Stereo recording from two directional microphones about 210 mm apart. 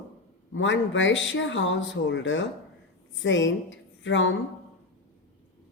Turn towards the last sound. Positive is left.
turn(degrees=65)  # may be behind; listen again after turning